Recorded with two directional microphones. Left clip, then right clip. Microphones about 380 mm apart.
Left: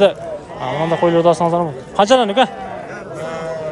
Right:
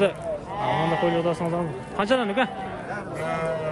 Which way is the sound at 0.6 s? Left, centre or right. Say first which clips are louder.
Left 4 dB; centre.